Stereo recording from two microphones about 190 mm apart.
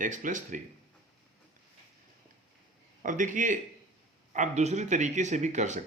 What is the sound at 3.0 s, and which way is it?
Speech, 40° right (ahead or behind).